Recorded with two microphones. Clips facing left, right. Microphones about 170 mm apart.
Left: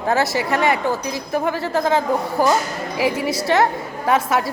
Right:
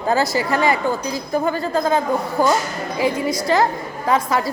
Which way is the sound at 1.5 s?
80° left.